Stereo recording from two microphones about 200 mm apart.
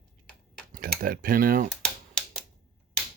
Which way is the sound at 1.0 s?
45° right (ahead or behind).